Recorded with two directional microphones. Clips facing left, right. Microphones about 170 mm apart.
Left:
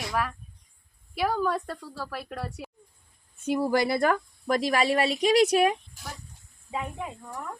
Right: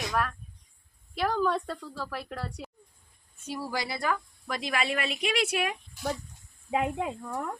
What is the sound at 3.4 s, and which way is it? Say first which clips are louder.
Speech: left 10 dB; 55° left (ahead or behind).